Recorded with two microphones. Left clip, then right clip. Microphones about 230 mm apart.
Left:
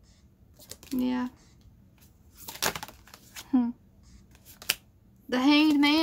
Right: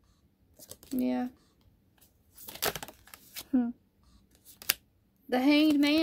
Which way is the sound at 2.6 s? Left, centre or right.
Right.